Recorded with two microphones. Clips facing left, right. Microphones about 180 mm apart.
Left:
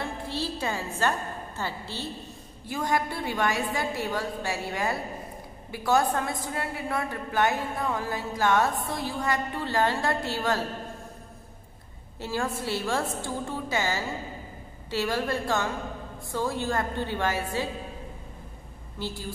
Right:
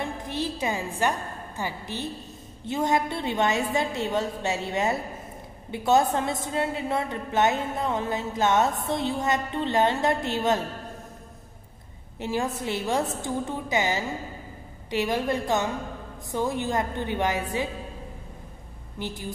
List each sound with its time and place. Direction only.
0.0 s music: 15° right (ahead or behind)
1.6 s a woman's voice: 15° right (ahead or behind)
12.2 s a woman's voice: 20° right (ahead or behind)
18.9 s a woman's voice: 20° right (ahead or behind)